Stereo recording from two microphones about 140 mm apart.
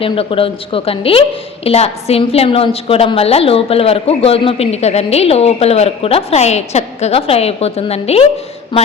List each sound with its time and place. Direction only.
0.0 s a woman's voice: 40° left (ahead or behind)